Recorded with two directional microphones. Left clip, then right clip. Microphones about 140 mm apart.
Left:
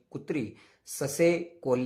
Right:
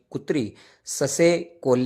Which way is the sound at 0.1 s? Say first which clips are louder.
Right 8 dB; 35° right (ahead or behind).